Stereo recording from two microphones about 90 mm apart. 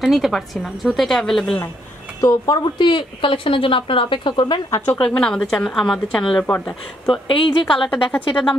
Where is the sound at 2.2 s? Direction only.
45° left (ahead or behind).